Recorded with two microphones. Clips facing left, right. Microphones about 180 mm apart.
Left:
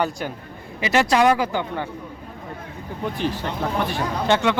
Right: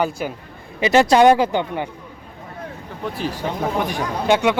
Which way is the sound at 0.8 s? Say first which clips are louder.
Right 5 dB; 25° right (ahead or behind).